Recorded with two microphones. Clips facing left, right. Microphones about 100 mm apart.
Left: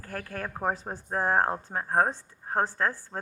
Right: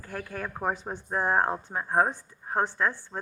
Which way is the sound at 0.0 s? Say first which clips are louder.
Even; 40° left (ahead or behind).